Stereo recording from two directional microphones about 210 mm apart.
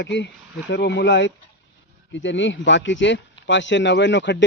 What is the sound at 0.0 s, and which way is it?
Speech, 55° left (ahead or behind).